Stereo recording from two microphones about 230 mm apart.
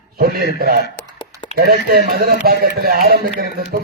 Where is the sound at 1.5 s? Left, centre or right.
Right.